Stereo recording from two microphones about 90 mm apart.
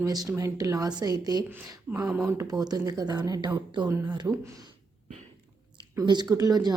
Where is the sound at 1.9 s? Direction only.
15° right (ahead or behind).